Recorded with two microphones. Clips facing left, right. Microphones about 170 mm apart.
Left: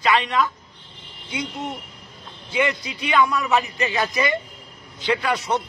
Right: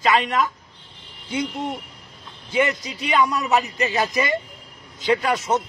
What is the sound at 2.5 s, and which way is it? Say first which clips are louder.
A man's voice: right 1 dB; 40° right (ahead or behind).